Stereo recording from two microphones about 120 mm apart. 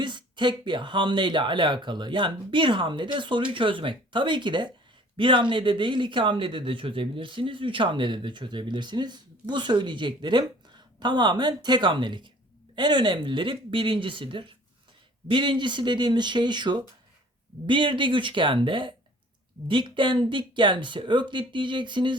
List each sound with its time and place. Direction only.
0.0 s speech: 40° right (ahead or behind)